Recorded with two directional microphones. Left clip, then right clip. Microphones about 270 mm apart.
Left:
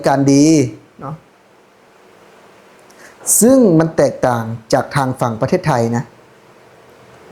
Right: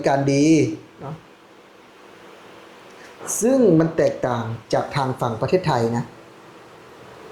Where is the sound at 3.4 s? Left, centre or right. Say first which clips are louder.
Left 5 dB; left.